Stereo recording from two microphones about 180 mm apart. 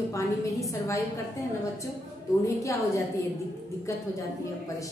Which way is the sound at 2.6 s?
15° left (ahead or behind).